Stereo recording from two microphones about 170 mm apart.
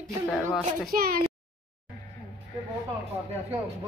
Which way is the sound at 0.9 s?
60° right (ahead or behind).